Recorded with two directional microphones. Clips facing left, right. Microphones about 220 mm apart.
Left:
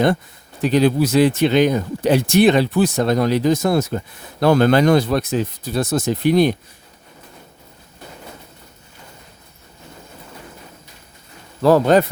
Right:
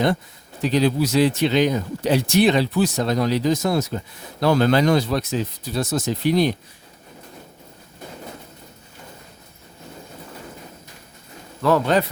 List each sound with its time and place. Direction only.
0.6 s speech: 55° left (ahead or behind)
11.6 s speech: 40° left (ahead or behind)